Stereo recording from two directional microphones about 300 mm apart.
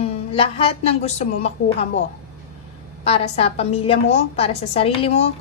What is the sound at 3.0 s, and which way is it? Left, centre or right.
A woman's voice, left.